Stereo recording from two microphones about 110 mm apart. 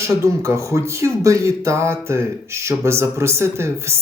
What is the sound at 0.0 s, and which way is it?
Speech, 25° right (ahead or behind).